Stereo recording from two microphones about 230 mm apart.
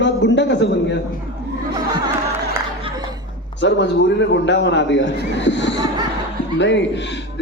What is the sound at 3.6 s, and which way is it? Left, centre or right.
A man's voice, left.